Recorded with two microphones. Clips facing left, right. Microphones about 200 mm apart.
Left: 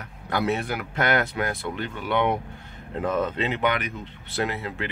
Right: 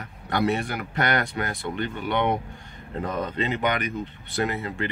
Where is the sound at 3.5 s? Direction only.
45° right (ahead or behind).